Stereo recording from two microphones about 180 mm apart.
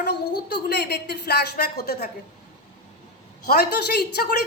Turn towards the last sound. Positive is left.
turn(degrees=60)  # may be behind; listen again after turning